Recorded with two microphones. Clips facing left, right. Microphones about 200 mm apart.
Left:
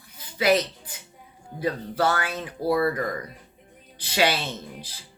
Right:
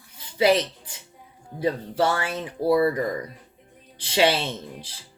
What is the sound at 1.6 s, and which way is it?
Speech, 25° right (ahead or behind).